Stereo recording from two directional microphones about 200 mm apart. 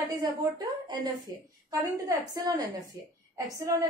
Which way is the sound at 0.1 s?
20° right (ahead or behind).